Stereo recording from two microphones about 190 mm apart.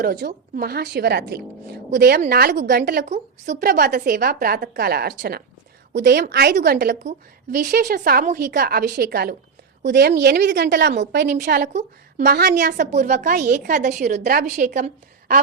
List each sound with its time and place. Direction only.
0.0 s a woman's voice: 50° right (ahead or behind)
11.7 s a woman's voice: 35° right (ahead or behind)
12.2 s a woman's voice: 55° right (ahead or behind)